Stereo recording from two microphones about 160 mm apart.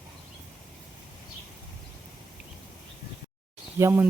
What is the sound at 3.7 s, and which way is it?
Speech, 20° right (ahead or behind).